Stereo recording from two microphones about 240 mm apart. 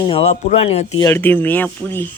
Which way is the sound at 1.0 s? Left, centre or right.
Centre.